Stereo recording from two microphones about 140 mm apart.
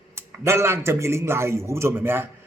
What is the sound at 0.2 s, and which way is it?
A man's voice, 15° right (ahead or behind).